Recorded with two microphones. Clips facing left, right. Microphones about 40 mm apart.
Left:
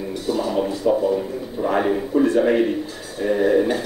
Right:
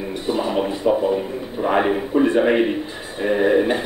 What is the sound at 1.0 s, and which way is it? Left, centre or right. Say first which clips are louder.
A man's voice: even; right.